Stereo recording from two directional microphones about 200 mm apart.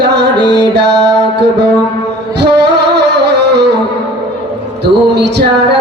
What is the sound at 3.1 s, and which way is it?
Music, 60° right (ahead or behind).